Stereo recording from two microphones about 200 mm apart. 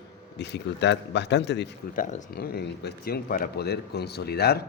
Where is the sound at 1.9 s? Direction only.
40° left (ahead or behind).